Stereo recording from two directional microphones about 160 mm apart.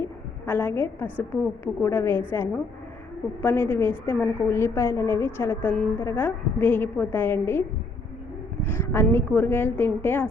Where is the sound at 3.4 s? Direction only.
15° left (ahead or behind).